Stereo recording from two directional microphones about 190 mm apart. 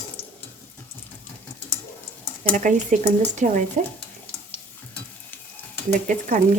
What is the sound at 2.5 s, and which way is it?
Speech, 45° right (ahead or behind).